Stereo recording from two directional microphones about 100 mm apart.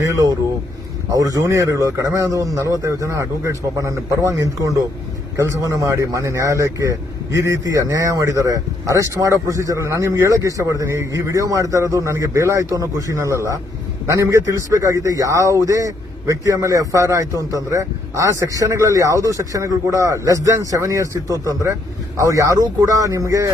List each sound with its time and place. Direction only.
0.0 s a man's voice: 35° right (ahead or behind)